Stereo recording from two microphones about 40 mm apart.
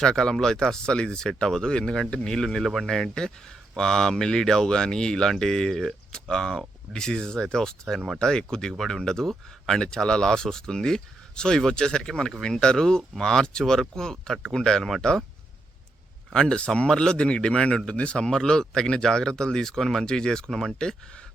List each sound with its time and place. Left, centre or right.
0.0 s a man's voice: centre
6.1 s a man's voice: centre
8.8 s speech: centre
16.3 s a man's voice: centre
18.2 s speech: centre
20.5 s speech: centre